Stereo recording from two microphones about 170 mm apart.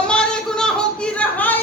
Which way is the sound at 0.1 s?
5° left (ahead or behind).